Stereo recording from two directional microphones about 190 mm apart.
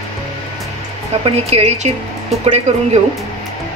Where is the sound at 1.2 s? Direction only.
35° right (ahead or behind).